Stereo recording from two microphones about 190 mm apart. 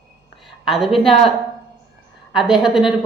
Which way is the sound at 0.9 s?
30° left (ahead or behind).